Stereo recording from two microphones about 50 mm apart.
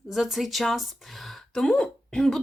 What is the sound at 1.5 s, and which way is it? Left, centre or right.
Speech, centre.